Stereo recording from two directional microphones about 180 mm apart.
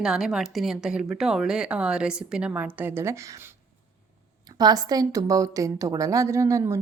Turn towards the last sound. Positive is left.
turn(degrees=-15)  # may be behind; listen again after turning